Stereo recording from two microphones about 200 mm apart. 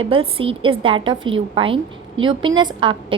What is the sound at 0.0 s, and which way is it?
A woman's voice, 25° right (ahead or behind).